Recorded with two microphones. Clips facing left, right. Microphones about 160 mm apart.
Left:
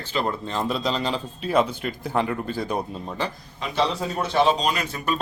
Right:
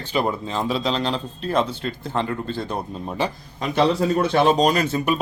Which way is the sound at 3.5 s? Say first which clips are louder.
Right 7 dB; 50° right (ahead or behind).